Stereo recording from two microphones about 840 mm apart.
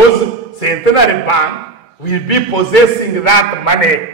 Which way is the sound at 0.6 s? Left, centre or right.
Left.